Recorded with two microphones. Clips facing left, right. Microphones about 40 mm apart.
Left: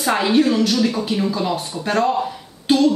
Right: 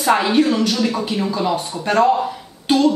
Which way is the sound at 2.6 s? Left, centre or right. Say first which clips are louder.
Even; centre.